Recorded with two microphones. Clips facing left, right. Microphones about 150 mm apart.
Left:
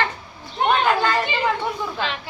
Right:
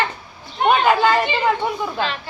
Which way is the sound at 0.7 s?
10° right (ahead or behind).